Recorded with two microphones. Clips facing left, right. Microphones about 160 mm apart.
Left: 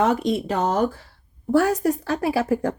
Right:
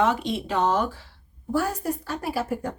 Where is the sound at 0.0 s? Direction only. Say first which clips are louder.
Left 3 dB; 45° left (ahead or behind).